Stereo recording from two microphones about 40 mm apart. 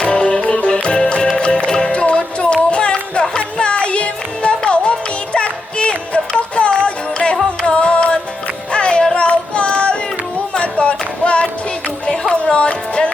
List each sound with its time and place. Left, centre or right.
0.0 s music: left
9.1 s child singing: left
10.6 s a sound: left
12.3 s music: left